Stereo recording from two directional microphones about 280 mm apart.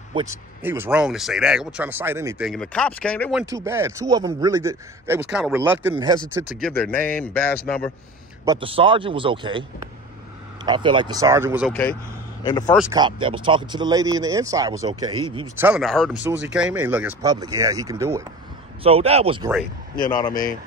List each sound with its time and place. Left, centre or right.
0.1 s speech: centre
3.5 s speech: centre
6.6 s speech: centre
8.5 s speech: centre
11.7 s speech: centre
12.9 s speech: centre
15.6 s speech: centre
20.0 s speech: centre